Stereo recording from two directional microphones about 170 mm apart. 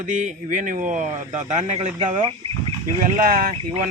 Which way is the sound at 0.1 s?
45° right (ahead or behind).